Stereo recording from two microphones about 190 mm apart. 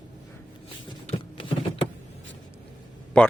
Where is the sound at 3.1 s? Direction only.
5° left (ahead or behind).